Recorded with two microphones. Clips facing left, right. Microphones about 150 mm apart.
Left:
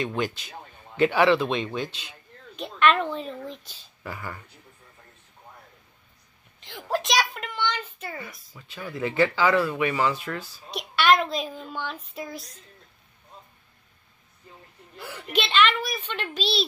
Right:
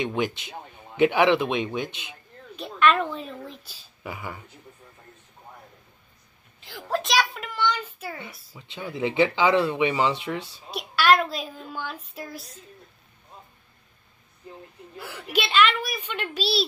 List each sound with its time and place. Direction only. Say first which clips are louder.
0.0 s a man's voice: right 1 dB; 15° right (ahead or behind)
2.0 s a sound: right 3 dB; 15° right (ahead or behind)
2.9 s a woman's voice: even; centre (ahead or behind)
6.6 s a sound: even; centre (ahead or behind)
8.5 s speech: right 2 dB; 20° right (ahead or behind)
10.7 s a woman's voice: right 1 dB; centre (ahead or behind)
15.0 s a woman's voice: even; 5° right (ahead or behind)